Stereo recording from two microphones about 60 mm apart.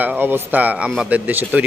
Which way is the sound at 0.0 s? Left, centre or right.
Right.